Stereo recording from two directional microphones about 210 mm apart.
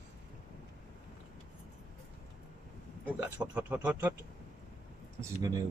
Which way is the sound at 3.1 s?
5° right (ahead or behind).